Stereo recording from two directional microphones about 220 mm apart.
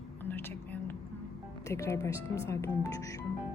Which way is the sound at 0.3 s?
10° left (ahead or behind).